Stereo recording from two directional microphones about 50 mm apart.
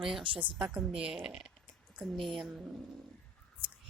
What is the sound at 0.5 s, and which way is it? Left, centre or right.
Speech, centre.